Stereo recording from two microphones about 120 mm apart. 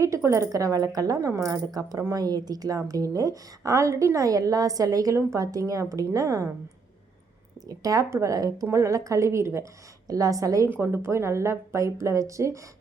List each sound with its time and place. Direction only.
0.0 s a woman's voice: 25° right (ahead or behind)
7.7 s a woman's voice: 30° right (ahead or behind)
10.7 s a woman's voice: 15° right (ahead or behind)